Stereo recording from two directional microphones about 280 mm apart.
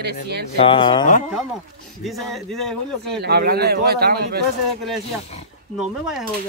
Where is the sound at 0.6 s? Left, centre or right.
Centre.